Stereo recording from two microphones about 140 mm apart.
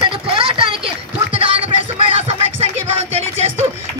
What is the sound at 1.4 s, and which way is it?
Music, 40° right (ahead or behind).